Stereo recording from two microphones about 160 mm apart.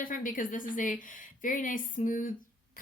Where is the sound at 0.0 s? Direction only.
60° left (ahead or behind).